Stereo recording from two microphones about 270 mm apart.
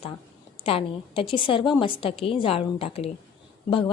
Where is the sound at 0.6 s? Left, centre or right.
Left.